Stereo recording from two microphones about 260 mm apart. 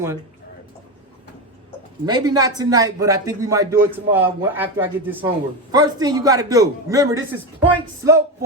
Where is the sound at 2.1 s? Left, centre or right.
Centre.